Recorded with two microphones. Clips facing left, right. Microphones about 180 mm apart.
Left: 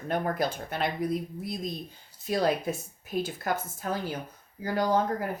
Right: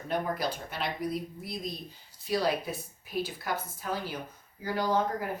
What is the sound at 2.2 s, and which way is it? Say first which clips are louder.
Speech: left 3 dB; 45° left (ahead or behind).